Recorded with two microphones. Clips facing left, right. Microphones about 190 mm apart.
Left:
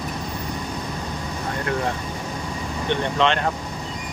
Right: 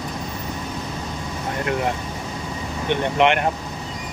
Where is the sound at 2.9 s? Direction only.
15° right (ahead or behind).